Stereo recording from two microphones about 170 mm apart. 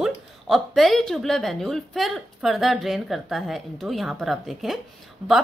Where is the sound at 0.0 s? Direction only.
Centre (ahead or behind).